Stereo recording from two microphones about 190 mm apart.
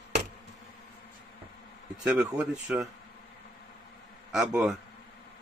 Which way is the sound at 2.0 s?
5° right (ahead or behind).